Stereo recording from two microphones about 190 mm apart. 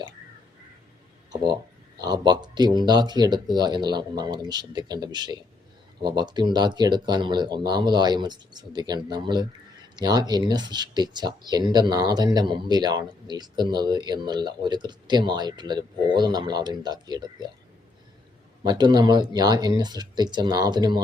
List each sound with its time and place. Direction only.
2.0 s speech: 20° right (ahead or behind)
18.6 s speech: 25° right (ahead or behind)